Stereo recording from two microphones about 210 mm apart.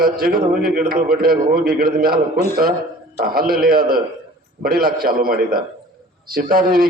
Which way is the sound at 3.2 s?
45° right (ahead or behind).